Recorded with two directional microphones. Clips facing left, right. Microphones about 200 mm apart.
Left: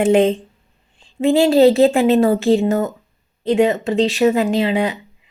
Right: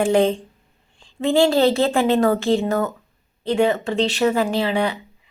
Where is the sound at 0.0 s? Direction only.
20° left (ahead or behind).